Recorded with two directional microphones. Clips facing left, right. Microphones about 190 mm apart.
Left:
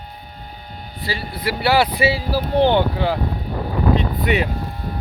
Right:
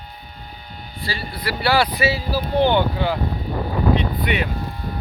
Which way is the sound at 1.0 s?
20° left (ahead or behind).